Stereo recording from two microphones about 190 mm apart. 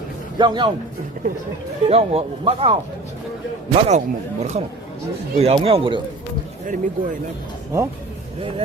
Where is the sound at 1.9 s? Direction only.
30° right (ahead or behind).